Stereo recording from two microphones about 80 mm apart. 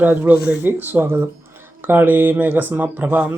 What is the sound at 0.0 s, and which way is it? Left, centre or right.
Speech, right.